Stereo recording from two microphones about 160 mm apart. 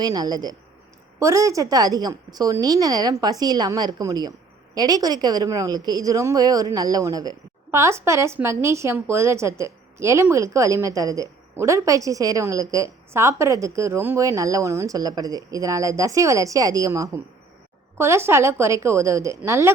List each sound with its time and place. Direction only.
0.0 s a woman's voice: 25° right (ahead or behind)